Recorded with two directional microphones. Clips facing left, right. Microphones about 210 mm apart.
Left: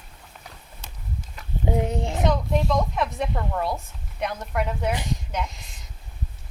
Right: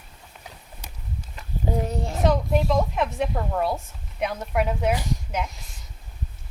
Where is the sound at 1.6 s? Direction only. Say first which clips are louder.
Left 2 dB; 20° left (ahead or behind).